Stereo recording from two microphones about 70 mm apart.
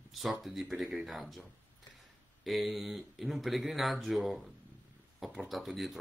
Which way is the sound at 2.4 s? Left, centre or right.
Centre.